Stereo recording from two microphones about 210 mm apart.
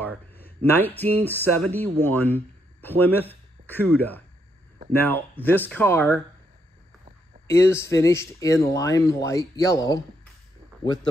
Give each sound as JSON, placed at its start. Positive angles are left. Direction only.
{"t": 0.7, "sound": "speech", "side_deg": 10}
{"t": 7.4, "sound": "speech", "side_deg": 10}